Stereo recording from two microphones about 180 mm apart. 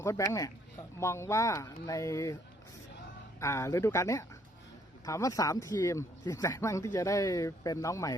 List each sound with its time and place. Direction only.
0.0 s speech: 15° left (ahead or behind)
3.4 s speech: 15° left (ahead or behind)